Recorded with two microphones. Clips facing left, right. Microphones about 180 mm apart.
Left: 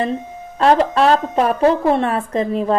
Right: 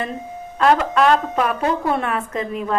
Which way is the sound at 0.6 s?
35° left (ahead or behind).